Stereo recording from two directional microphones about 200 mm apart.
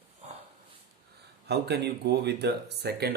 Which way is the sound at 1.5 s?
55° right (ahead or behind).